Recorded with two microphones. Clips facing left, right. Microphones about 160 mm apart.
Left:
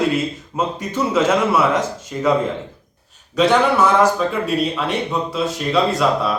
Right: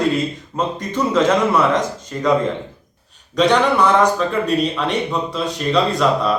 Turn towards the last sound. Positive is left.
turn(degrees=5)  # may be behind; listen again after turning